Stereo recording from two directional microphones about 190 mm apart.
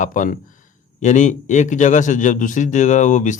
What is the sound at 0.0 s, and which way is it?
A man's voice, 45° left (ahead or behind).